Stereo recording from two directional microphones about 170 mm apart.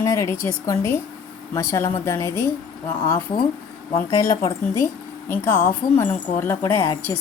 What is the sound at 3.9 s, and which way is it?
Speech, 20° left (ahead or behind).